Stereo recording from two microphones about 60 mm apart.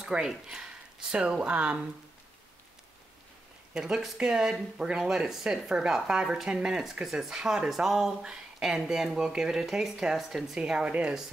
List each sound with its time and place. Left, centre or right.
0.0 s speech: centre
3.7 s speech: centre
10.6 s speech: centre